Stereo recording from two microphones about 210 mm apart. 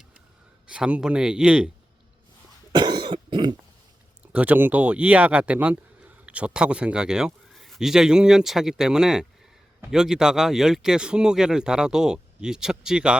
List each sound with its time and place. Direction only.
0.7 s speech: 5° right (ahead or behind)
2.7 s cough: 20° right (ahead or behind)
4.3 s speech: 5° right (ahead or behind)